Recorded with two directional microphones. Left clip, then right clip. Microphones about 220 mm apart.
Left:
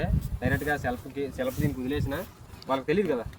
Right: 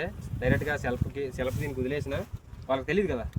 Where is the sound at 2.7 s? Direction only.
50° right (ahead or behind).